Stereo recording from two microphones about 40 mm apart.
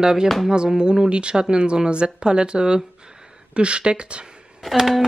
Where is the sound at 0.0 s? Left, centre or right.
Centre.